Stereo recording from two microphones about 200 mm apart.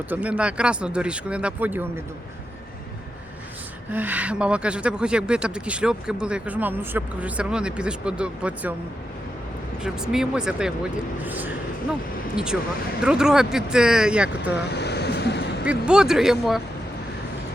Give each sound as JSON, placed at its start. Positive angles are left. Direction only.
{"t": 0.1, "sound": "speech", "side_deg": -5}
{"t": 3.9, "sound": "speech", "side_deg": -10}
{"t": 9.8, "sound": "speech", "side_deg": -5}
{"t": 12.5, "sound": "speech", "side_deg": -5}
{"t": 14.7, "sound": "vehicle", "side_deg": 55}
{"t": 15.6, "sound": "speech", "side_deg": -5}